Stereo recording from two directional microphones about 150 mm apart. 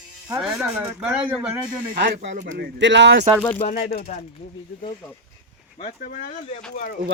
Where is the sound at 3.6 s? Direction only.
60° left (ahead or behind); by 4.0 s 75° left (ahead or behind).